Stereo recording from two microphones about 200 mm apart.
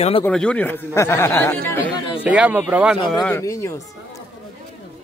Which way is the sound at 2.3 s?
5° right (ahead or behind).